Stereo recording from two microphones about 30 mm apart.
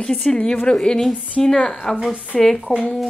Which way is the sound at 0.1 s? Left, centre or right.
Centre.